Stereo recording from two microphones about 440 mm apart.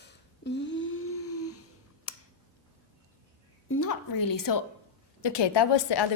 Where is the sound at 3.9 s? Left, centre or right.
Left.